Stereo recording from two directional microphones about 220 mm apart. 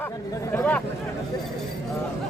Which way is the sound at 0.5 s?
5° left (ahead or behind).